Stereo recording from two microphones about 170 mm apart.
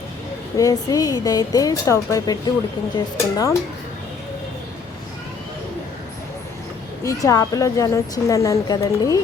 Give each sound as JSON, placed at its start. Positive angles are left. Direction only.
{"t": 0.5, "sound": "a woman's voice", "side_deg": 20}
{"t": 7.0, "sound": "a woman's voice", "side_deg": 20}